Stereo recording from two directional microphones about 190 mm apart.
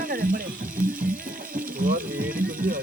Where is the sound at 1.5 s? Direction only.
45° right (ahead or behind).